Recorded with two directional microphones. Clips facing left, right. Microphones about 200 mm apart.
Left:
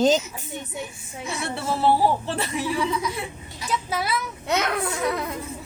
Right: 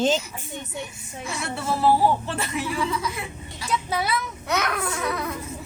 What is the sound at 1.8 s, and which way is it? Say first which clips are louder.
Speech: even; 35° left (ahead or behind).